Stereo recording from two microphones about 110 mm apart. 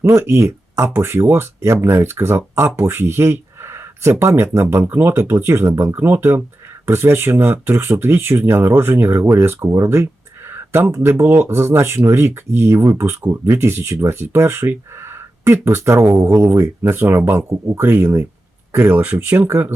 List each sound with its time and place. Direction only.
0.0 s speech: 25° right (ahead or behind)